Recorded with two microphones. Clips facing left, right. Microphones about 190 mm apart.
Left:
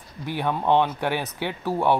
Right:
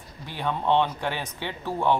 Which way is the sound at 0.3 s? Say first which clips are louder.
Left 3 dB; 10° left (ahead or behind).